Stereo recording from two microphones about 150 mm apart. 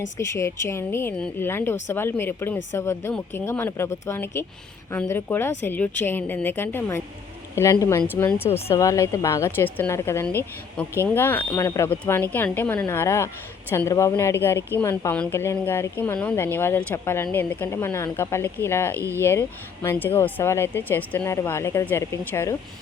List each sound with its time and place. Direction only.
0.2 s a woman's voice: 20° left (ahead or behind)
18.9 s speech: 15° right (ahead or behind)
19.2 s speech: 15° left (ahead or behind)